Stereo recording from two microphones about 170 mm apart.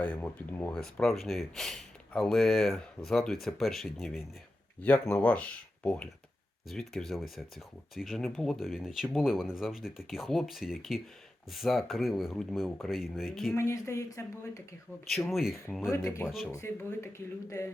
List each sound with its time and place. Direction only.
0.0 s speech: 10° left (ahead or behind)
13.6 s speech: 15° left (ahead or behind)
15.1 s speech: centre (ahead or behind)
15.9 s speech: 15° left (ahead or behind)